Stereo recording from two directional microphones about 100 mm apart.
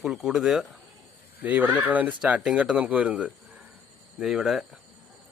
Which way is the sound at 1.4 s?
15° right (ahead or behind).